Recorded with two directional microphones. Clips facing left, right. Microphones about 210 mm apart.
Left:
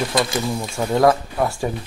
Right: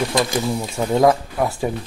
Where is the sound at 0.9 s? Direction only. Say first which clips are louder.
Even; 15° right (ahead or behind).